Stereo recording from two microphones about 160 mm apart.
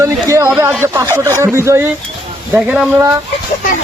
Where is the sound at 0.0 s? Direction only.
20° right (ahead or behind).